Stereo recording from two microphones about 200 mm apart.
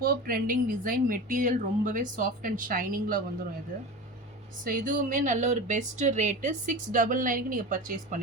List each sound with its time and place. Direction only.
0.0 s a woman's voice: 45° right (ahead or behind)
4.6 s speech: 40° right (ahead or behind)